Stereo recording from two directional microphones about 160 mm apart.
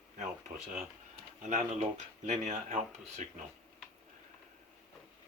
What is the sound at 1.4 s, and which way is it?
Speech, 45° right (ahead or behind).